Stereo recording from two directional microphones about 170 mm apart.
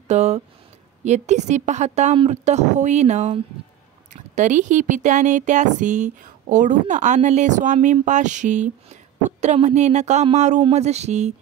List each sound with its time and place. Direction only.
0.1 s speech: 40° right (ahead or behind)